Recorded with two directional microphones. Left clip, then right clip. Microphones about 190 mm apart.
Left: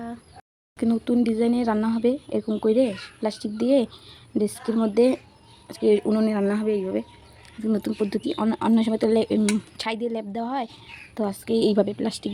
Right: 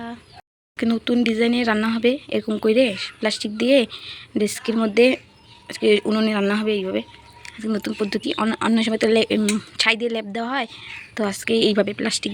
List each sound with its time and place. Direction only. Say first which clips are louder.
0.8 s speech: right 2 dB; 5° left (ahead or behind)
7.4 s speech: right 1 dB; 20° left (ahead or behind)